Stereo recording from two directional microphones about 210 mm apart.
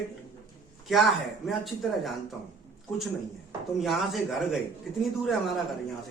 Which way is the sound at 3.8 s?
Centre (ahead or behind).